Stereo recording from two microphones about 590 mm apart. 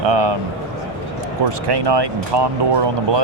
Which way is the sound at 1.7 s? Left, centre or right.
Right.